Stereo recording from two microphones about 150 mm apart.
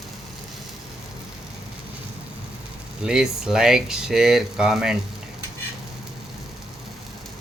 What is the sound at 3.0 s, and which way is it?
Speech, 5° right (ahead or behind).